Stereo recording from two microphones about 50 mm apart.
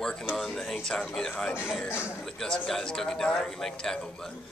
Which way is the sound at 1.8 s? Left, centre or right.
Left.